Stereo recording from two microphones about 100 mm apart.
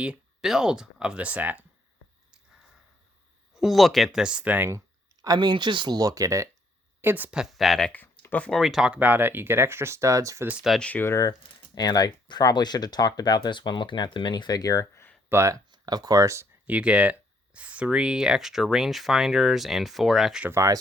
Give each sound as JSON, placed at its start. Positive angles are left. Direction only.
{"t": 0.0, "sound": "speech", "side_deg": -10}
{"t": 3.5, "sound": "speech", "side_deg": -5}
{"t": 5.2, "sound": "speech", "side_deg": -45}
{"t": 6.0, "sound": "speech", "side_deg": -35}
{"t": 7.0, "sound": "speech", "side_deg": -20}
{"t": 8.0, "sound": "a sound", "side_deg": 20}
{"t": 8.5, "sound": "speech", "side_deg": 0}
{"t": 10.8, "sound": "speech", "side_deg": 10}
{"t": 11.0, "sound": "speech", "side_deg": 35}
{"t": 15.3, "sound": "speech", "side_deg": -30}
{"t": 15.7, "sound": "speech", "side_deg": -40}
{"t": 16.6, "sound": "speech", "side_deg": -15}
{"t": 20.5, "sound": "speech", "side_deg": -30}